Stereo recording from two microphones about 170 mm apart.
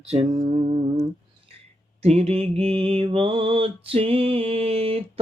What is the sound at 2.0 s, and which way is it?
Mantra, 35° right (ahead or behind).